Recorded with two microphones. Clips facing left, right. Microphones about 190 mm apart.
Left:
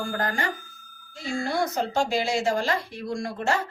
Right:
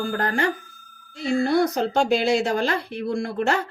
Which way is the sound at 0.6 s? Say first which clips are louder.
Right 1 dB; centre (ahead or behind).